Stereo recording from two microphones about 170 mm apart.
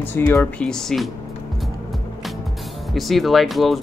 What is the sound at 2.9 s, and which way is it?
Speech, centre (ahead or behind).